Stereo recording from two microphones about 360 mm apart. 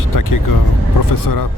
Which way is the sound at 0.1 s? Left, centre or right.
Left.